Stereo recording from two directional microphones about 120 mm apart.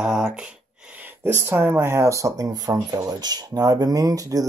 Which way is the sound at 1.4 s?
20° right (ahead or behind).